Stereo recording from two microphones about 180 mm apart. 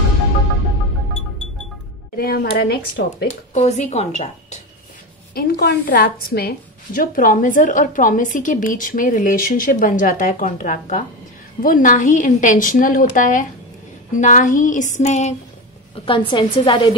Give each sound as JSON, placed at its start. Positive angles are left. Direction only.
{"t": 2.1, "sound": "speech", "side_deg": 55}
{"t": 3.3, "sound": "speech", "side_deg": 40}
{"t": 5.3, "sound": "a woman's voice", "side_deg": 60}
{"t": 16.3, "sound": "a woman's voice", "side_deg": 25}